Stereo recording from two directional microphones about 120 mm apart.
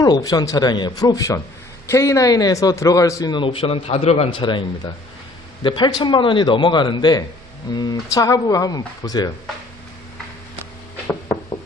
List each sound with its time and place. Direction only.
0.0 s a man's voice: 30° left (ahead or behind)
3.3 s a man's voice: 50° left (ahead or behind)
4.3 s a man's voice: 45° left (ahead or behind)